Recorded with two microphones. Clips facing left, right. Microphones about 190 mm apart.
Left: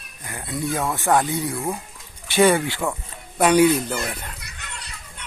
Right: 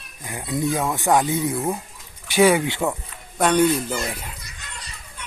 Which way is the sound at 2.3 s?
10° right (ahead or behind).